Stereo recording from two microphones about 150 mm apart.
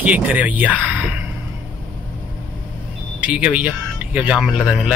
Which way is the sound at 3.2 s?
10° right (ahead or behind).